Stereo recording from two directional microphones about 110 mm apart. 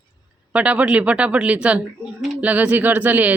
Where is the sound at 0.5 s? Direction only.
10° right (ahead or behind).